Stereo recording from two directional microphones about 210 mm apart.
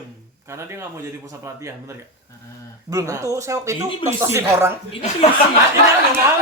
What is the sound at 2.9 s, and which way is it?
Speech, 15° right (ahead or behind).